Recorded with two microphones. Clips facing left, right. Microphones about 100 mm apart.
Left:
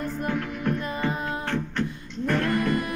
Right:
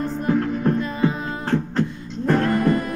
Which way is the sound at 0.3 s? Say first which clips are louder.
Right 10 dB; 35° right (ahead or behind).